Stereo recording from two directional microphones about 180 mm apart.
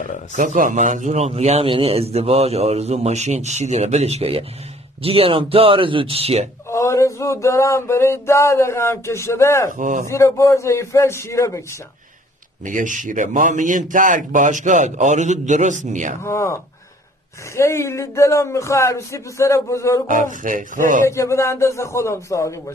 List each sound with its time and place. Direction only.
0.4 s a man's voice: 45° right (ahead or behind)
6.7 s male singing: 15° left (ahead or behind)
9.8 s a man's voice: 45° right (ahead or behind)
10.0 s speech: 15° left (ahead or behind)
12.6 s a man's voice: 45° right (ahead or behind)
16.2 s speech: 15° left (ahead or behind)
20.1 s a man's voice: 45° right (ahead or behind)
21.0 s speech: 15° left (ahead or behind)